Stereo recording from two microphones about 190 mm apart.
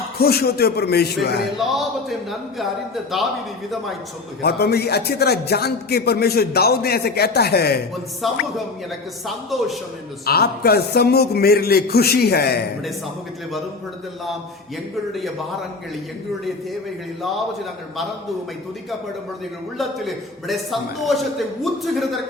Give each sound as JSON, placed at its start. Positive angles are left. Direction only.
{"t": 0.2, "sound": "a man's voice", "side_deg": 55}
{"t": 1.5, "sound": "a man's voice", "side_deg": 0}
{"t": 4.4, "sound": "a man's voice", "side_deg": 55}
{"t": 8.2, "sound": "a man's voice", "side_deg": 0}
{"t": 10.2, "sound": "a man's voice", "side_deg": 55}
{"t": 19.8, "sound": "a man's voice", "side_deg": 0}